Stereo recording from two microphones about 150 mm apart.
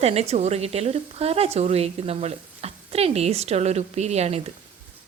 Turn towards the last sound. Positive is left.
turn(degrees=-45)  # may be behind; listen again after turning